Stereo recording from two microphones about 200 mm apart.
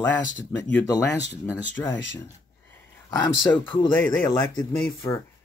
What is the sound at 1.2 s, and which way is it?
Speech, 60° left (ahead or behind).